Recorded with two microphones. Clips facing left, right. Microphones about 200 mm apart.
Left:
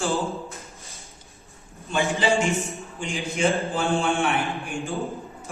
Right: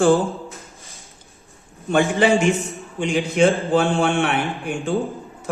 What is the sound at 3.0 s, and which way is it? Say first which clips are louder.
A man's voice: right 8 dB; 70° right (ahead or behind).